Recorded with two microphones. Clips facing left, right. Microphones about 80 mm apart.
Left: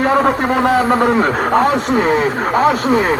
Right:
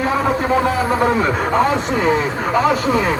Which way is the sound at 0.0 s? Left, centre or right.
Left.